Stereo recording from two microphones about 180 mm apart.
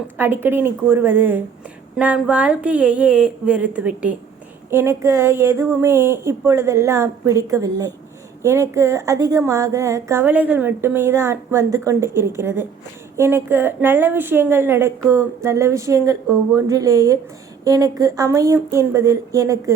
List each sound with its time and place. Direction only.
0.2 s a woman's voice: 10° right (ahead or behind)